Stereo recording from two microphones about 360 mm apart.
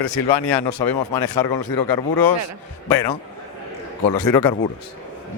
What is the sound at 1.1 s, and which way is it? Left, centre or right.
Speech, left.